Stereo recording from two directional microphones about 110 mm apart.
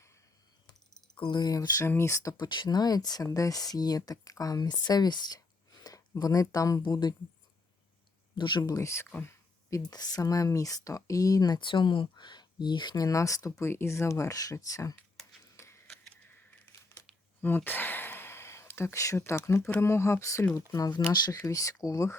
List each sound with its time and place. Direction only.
1.1 s speech: 45° left (ahead or behind); by 2.5 s 30° left (ahead or behind)
2.5 s speech: 40° left (ahead or behind)
8.4 s speech: 45° left (ahead or behind)
8.7 s speech: 25° left (ahead or behind)
15.5 s a sound: 25° left (ahead or behind)
17.4 s speech: 20° left (ahead or behind)